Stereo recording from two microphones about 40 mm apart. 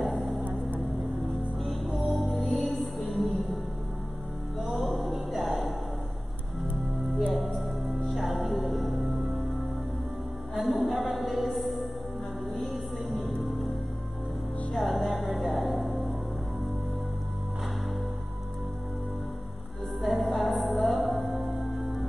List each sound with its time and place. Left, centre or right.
0.0 s vehicle: centre
1.6 s music: centre
4.6 s music: centre
7.5 s music: centre
10.5 s music: centre
14.7 s music: centre
20.0 s music: centre